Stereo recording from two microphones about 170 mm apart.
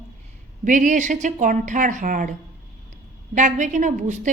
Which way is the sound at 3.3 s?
45° right (ahead or behind).